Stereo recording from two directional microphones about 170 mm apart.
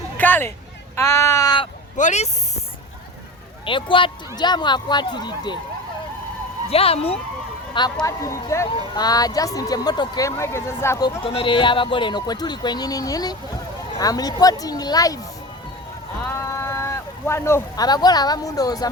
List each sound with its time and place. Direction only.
0.2 s speech: 10° left (ahead or behind)
2.0 s speech: 45° left (ahead or behind)
3.7 s speech: 30° left (ahead or behind)
6.7 s speech: 35° left (ahead or behind); by 11.1 s 15° left (ahead or behind)
11.2 s speech: 30° left (ahead or behind)
16.2 s speech: 15° left (ahead or behind)